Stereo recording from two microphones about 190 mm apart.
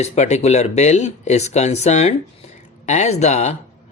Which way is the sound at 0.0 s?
35° left (ahead or behind).